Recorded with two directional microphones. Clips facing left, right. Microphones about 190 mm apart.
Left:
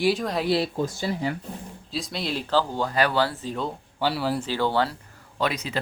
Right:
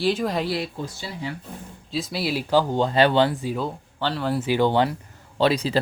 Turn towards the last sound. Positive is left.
turn(degrees=-30)  # may be behind; listen again after turning